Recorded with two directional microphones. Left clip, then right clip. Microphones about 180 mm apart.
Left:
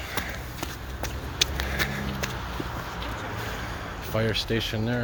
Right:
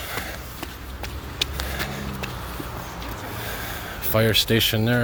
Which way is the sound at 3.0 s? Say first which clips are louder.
Even; 60° right (ahead or behind).